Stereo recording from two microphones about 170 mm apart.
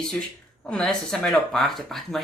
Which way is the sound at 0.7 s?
5° left (ahead or behind).